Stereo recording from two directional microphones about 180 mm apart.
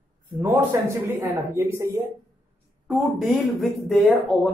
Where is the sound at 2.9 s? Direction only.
Centre (ahead or behind).